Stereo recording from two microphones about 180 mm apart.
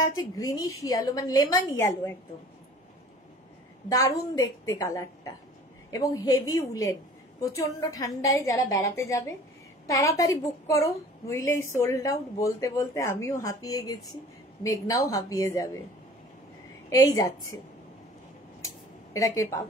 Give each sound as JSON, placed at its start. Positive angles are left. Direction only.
{"t": 0.0, "sound": "a woman's voice", "side_deg": 20}
{"t": 3.9, "sound": "a woman's voice", "side_deg": 20}
{"t": 16.9, "sound": "a woman's voice", "side_deg": 20}
{"t": 19.1, "sound": "a woman's voice", "side_deg": 20}